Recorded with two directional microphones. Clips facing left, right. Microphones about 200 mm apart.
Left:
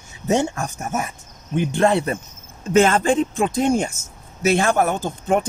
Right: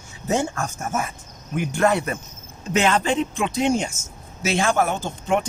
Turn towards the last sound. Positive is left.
turn(degrees=45)  # may be behind; listen again after turning